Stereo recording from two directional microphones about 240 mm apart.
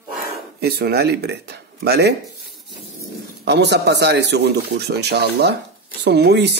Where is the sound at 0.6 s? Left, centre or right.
Right.